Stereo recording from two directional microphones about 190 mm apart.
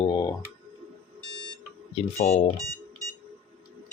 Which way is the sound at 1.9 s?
35° left (ahead or behind).